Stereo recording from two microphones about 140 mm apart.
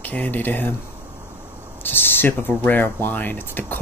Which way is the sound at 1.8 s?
15° left (ahead or behind).